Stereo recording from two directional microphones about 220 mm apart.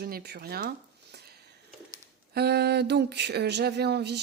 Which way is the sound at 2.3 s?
45° right (ahead or behind).